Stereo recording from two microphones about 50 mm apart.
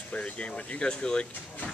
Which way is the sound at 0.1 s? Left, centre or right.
Left.